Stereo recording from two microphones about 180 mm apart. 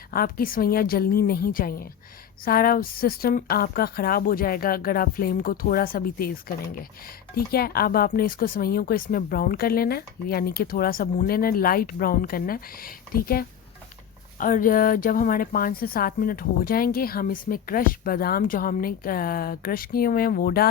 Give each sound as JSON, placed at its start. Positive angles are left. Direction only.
{"t": 0.1, "sound": "a woman's voice", "side_deg": 55}
{"t": 7.3, "sound": "a woman's voice", "side_deg": 55}